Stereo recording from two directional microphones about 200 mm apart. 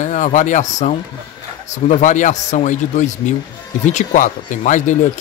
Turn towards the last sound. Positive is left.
turn(degrees=40)  # may be behind; listen again after turning